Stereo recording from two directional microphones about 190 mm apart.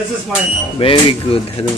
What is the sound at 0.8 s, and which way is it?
Speech, 30° left (ahead or behind).